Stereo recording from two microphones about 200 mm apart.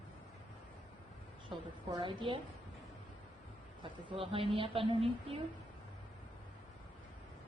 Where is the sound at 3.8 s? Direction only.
25° right (ahead or behind).